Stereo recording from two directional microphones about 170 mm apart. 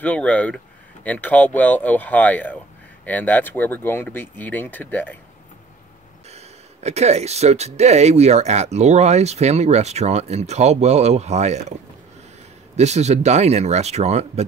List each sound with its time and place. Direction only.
0.0 s speech: 10° left (ahead or behind)
6.3 s speech: 40° right (ahead or behind)
12.7 s speech: 40° right (ahead or behind)